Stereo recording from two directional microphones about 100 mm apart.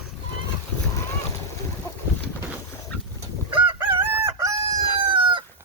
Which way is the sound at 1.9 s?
30° left (ahead or behind).